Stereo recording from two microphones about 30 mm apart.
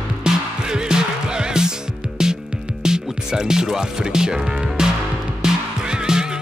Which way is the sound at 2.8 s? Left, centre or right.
Right.